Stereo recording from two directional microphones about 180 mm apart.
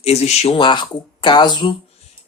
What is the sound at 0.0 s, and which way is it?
Speech, 35° left (ahead or behind).